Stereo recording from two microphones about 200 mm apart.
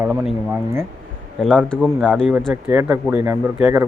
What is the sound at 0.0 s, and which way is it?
Speech, 10° right (ahead or behind).